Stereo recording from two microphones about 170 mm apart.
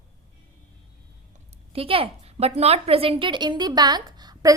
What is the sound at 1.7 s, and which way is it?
A woman's voice, 35° right (ahead or behind).